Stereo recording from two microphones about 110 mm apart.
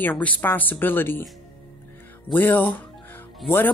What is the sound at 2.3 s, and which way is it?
Speech, 20° left (ahead or behind).